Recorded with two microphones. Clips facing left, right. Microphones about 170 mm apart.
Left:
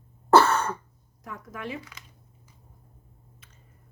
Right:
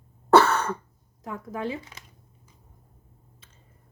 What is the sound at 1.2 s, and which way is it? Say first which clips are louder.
Speech: right 6 dB; 30° right (ahead or behind).